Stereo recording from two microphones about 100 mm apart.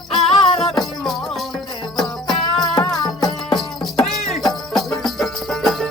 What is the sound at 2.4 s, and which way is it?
Music, 40° left (ahead or behind).